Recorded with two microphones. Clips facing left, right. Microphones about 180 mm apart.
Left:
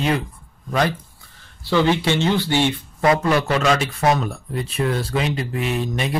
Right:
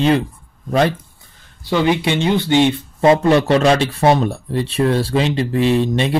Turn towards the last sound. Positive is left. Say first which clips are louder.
# right 8 dB
turn(degrees=-25)  # may be behind; listen again after turning